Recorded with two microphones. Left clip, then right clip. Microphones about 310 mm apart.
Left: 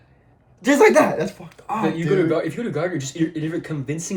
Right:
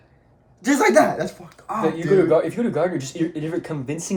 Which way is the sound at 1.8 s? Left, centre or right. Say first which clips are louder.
Right 2 dB; centre.